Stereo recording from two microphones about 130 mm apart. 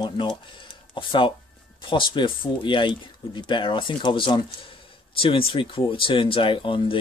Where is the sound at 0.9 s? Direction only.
40° left (ahead or behind).